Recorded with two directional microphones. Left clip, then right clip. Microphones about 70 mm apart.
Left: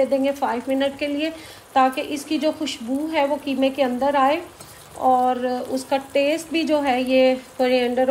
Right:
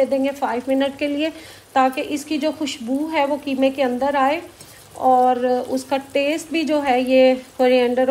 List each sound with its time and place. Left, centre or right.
0.0 s a woman's voice: left
0.7 s speech: centre
1.7 s a woman's voice: left
5.3 s speech: left
6.5 s speech: left; by 8.1 s centre